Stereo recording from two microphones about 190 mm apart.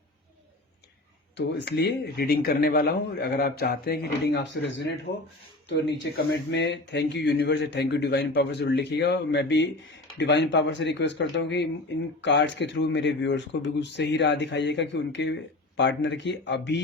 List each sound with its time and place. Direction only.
1.4 s speech: 65° left (ahead or behind)